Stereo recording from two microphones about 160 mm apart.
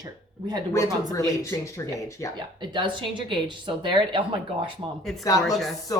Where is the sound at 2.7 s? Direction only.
30° right (ahead or behind).